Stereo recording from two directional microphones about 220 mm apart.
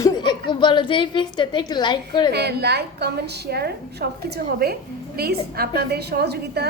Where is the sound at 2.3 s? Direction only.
50° right (ahead or behind).